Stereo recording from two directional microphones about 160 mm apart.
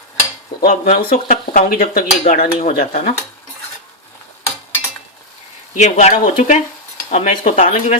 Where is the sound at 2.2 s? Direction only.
55° left (ahead or behind).